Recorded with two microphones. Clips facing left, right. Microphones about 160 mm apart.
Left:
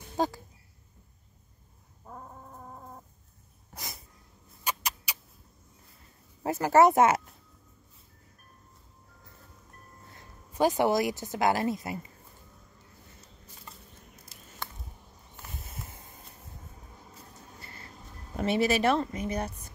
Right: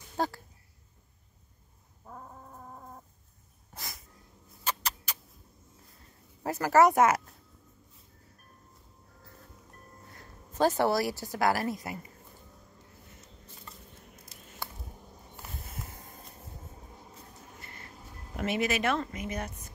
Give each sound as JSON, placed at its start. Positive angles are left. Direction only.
{"t": 0.2, "sound": "speech", "side_deg": 15}
{"t": 3.7, "sound": "sneeze", "side_deg": 20}
{"t": 4.6, "sound": "rodents", "side_deg": 10}
{"t": 6.4, "sound": "speech", "side_deg": 25}
{"t": 10.1, "sound": "a woman's voice", "side_deg": 15}
{"t": 17.6, "sound": "vehicle", "side_deg": 30}
{"t": 18.3, "sound": "a woman's voice", "side_deg": 30}